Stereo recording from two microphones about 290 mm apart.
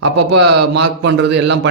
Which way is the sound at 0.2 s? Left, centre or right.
Right.